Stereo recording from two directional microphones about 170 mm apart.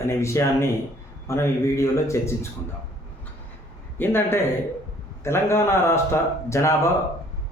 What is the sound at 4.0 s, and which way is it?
A man's voice, 10° left (ahead or behind).